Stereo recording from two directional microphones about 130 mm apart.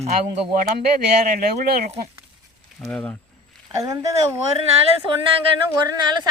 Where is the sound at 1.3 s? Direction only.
90° right.